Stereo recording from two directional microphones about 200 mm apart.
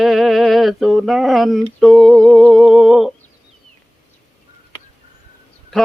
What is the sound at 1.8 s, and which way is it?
Humming, centre (ahead or behind).